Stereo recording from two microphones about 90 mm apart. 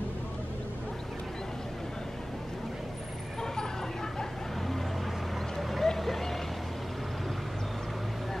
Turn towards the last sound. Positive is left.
turn(degrees=5)  # may be behind; listen again after turning